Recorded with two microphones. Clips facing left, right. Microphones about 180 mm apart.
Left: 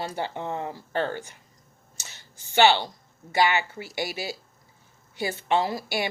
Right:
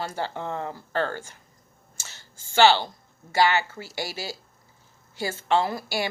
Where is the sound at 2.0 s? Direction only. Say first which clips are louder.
Right 1 dB; 20° left (ahead or behind).